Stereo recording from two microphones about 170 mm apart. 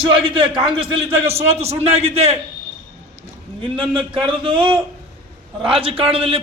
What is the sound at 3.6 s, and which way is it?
Speech, 30° right (ahead or behind).